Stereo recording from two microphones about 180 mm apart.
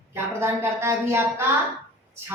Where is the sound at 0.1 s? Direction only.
15° right (ahead or behind).